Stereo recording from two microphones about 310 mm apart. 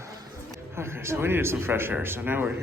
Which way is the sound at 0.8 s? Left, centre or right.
Centre.